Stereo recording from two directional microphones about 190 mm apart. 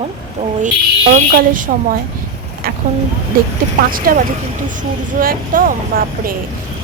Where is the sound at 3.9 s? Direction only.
50° right (ahead or behind).